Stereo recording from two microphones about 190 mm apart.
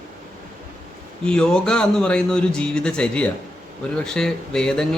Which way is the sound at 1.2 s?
5° left (ahead or behind).